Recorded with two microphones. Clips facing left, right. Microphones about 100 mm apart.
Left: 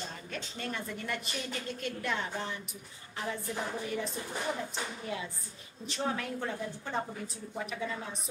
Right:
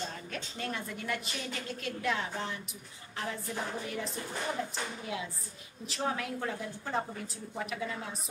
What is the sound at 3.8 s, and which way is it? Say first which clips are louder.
Speech: left 2 dB; centre (ahead or behind).